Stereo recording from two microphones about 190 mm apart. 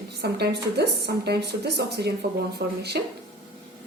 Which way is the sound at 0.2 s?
60° right (ahead or behind).